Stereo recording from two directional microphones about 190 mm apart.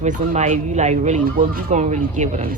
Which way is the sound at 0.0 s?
40° right (ahead or behind).